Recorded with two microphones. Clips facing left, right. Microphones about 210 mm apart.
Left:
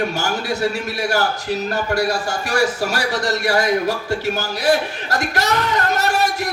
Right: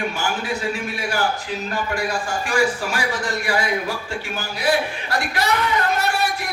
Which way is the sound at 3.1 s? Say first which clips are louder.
Left 5 dB; 75° left (ahead or behind).